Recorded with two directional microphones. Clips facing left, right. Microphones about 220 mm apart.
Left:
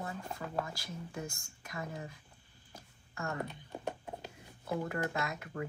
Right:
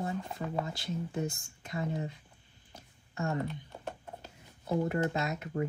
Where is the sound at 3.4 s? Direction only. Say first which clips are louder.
Even; 15° left (ahead or behind).